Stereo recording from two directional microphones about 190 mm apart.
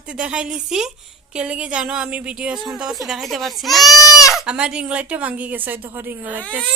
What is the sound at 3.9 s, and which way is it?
Speech, 20° left (ahead or behind).